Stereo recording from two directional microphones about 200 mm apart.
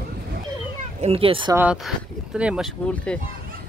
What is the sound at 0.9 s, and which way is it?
Speech, 30° right (ahead or behind).